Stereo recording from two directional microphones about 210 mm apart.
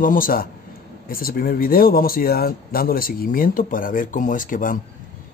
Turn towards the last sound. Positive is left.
turn(degrees=40)  # may be behind; listen again after turning